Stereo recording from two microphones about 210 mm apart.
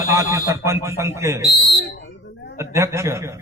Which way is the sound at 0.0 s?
15° right (ahead or behind).